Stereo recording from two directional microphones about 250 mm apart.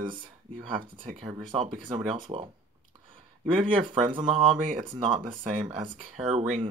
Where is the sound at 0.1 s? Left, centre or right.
Centre.